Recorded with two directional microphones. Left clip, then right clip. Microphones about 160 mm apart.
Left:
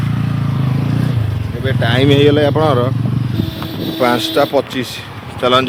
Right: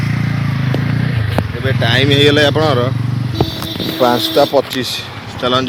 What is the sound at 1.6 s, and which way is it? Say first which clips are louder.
Speech: right 1 dB; 20° left (ahead or behind).